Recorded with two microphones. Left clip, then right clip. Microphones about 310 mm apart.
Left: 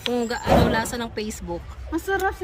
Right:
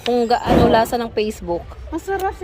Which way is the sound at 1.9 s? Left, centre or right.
Centre.